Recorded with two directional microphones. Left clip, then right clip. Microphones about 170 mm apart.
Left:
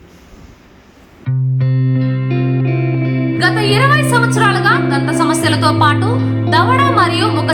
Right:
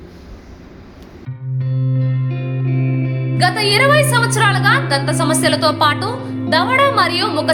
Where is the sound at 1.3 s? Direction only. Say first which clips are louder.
Left 8 dB; centre (ahead or behind).